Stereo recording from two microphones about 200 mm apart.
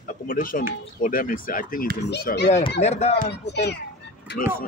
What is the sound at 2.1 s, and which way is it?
Speech, 55° left (ahead or behind).